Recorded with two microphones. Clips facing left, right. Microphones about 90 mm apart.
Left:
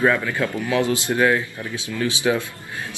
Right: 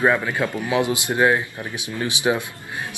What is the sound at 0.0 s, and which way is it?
A man's voice, 20° right (ahead or behind).